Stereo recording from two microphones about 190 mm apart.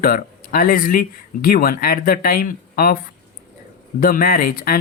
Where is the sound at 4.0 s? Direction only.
50° left (ahead or behind).